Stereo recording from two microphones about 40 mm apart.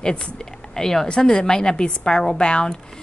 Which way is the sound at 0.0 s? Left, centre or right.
Left.